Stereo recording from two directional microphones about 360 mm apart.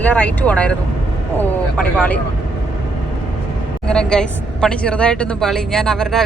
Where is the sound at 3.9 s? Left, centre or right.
Centre.